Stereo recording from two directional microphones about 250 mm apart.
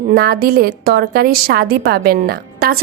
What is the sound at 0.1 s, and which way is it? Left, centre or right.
A woman's voice, right.